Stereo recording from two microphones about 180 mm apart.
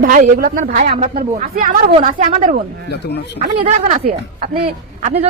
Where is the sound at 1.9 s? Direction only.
35° right (ahead or behind).